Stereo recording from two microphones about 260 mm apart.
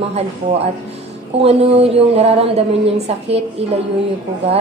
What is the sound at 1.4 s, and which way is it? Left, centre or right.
A woman's voice, right.